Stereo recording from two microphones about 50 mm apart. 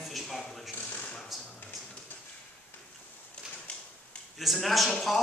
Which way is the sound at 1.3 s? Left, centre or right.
Centre.